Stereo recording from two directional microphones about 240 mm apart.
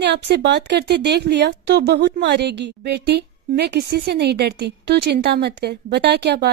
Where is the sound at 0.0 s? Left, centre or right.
Right.